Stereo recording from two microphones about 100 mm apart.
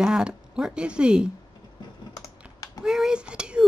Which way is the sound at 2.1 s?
35° left (ahead or behind).